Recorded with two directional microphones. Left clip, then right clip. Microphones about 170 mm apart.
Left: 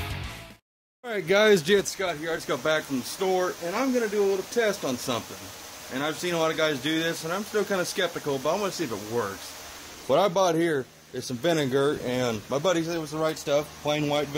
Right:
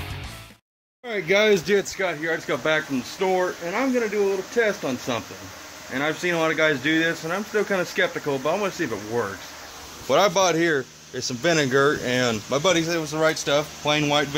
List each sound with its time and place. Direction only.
1.0 s speech: 15° left (ahead or behind)
5.9 s speech: 10° left (ahead or behind)
10.0 s speech: 35° left (ahead or behind); by 14.2 s 5° left (ahead or behind)